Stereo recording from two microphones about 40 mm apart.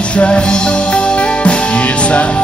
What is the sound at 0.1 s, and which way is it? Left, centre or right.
Music, left.